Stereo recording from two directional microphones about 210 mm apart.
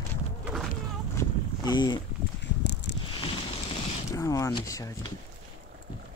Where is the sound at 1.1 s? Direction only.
20° left (ahead or behind).